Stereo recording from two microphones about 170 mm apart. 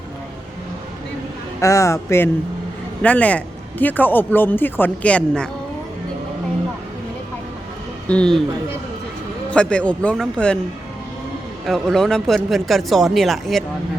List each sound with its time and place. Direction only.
1.6 s a man's voice: 20° left (ahead or behind)
8.0 s a man's voice: 5° left (ahead or behind)
9.5 s a man's voice: 5° left (ahead or behind)
11.6 s speech: centre (ahead or behind)